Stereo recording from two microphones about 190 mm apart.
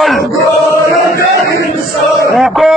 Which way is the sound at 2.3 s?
Centre (ahead or behind).